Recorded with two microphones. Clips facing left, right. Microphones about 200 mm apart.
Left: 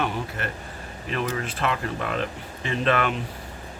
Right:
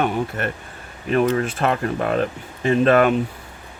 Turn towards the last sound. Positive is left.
turn(degrees=-45)  # may be behind; listen again after turning